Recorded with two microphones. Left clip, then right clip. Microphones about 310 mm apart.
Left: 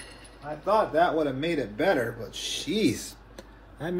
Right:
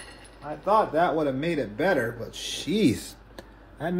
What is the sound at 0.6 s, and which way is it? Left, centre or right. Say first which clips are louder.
Speech: right 1 dB; right.